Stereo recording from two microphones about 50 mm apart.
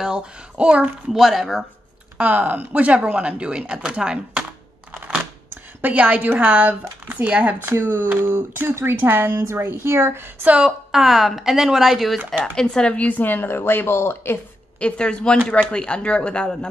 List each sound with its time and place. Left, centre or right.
0.6 s speech: right
1.1 s speech: centre
2.1 s speech: right
5.5 s a woman's voice: right
7.6 s speech: right
8.9 s speech: right
9.4 s a woman's voice: right
10.6 s a woman's voice: centre
12.5 s speech: centre
12.9 s a woman's voice: left
14.8 s speech: left